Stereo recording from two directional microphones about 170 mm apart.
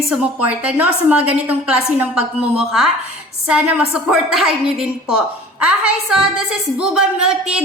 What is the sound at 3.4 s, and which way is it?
A woman's voice, 5° right (ahead or behind).